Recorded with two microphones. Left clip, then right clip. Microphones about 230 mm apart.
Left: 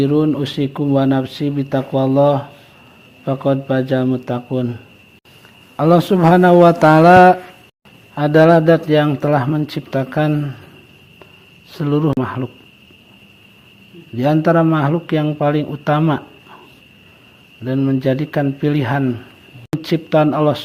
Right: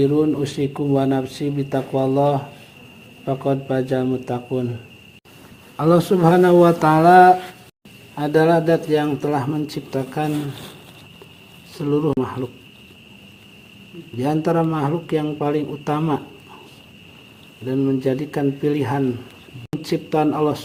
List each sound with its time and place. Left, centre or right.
0.0 s speech: left
11.7 s speech: left
14.2 s speech: left
17.7 s speech: left